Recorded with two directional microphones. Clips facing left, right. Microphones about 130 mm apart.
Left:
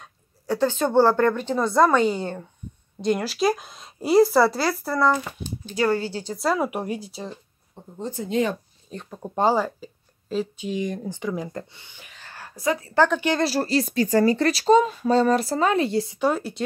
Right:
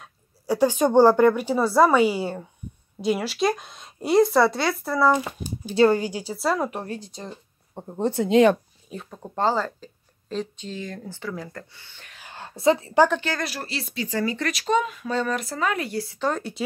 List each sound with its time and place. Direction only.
0.0 s speech: 10° right (ahead or behind)
5.1 s speech: 15° right (ahead or behind)
6.7 s speech: 10° left (ahead or behind)
7.7 s speech: 60° right (ahead or behind); by 8.5 s 80° right
8.9 s speech: 5° left (ahead or behind)
12.2 s a sound: 20° right (ahead or behind)
13.4 s speech: 35° left (ahead or behind)
16.2 s speech: 10° left (ahead or behind)